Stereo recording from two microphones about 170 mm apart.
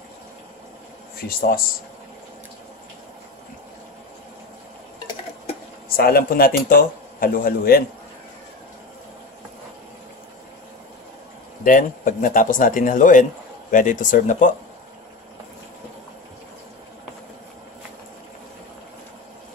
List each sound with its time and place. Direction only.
5.9 s speech: 60° left (ahead or behind)
11.6 s speech: 50° left (ahead or behind)